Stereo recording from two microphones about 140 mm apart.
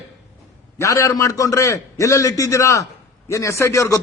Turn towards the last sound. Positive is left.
turn(degrees=25)  # may be behind; listen again after turning